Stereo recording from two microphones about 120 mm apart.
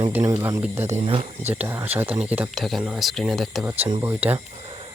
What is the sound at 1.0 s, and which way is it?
Speech, 55° right (ahead or behind).